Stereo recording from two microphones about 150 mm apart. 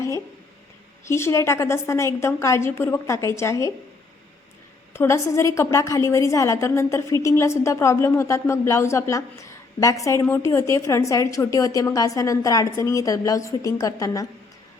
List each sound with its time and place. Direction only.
1.0 s a woman's voice: 20° left (ahead or behind)
4.9 s a woman's voice: 20° left (ahead or behind)